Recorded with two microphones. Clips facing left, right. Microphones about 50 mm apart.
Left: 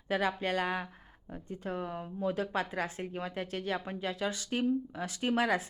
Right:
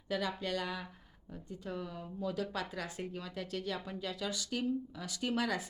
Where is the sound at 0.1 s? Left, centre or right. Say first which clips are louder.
Left 5 dB; left.